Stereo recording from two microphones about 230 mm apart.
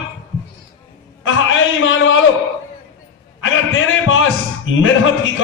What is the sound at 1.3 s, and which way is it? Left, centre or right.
Speech, left.